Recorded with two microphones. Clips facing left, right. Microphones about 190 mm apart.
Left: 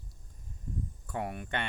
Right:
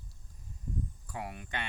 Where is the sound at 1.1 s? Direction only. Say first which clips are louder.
Left 5 dB; 50° left (ahead or behind).